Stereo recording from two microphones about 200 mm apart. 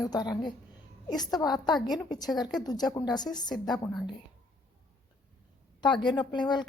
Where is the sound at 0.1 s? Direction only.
20° left (ahead or behind).